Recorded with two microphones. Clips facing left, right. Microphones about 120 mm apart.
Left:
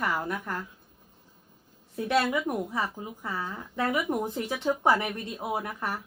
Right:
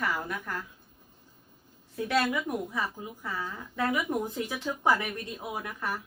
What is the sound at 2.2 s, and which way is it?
Speech, 25° left (ahead or behind).